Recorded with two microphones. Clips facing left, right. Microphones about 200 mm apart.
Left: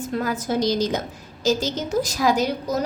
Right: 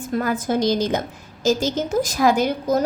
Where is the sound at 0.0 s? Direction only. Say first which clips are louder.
Right 2 dB; 50° right (ahead or behind).